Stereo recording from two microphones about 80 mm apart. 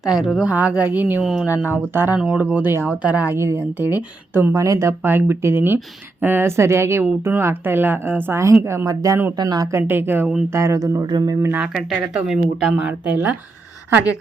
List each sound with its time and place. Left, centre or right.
0.0 s a woman's voice: centre
1.2 s speech: centre
1.5 s a woman's voice: right
2.1 s a woman's voice: centre
3.3 s a woman's voice: right
4.5 s a woman's voice: right
9.7 s a woman's voice: right
10.5 s speech: right
11.0 s speech: right
11.6 s speech: centre
12.8 s speech: centre